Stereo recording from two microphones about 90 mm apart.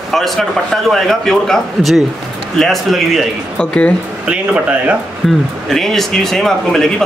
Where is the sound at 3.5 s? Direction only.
15° left (ahead or behind).